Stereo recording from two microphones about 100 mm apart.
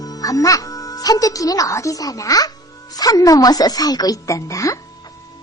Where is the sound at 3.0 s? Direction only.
35° left (ahead or behind).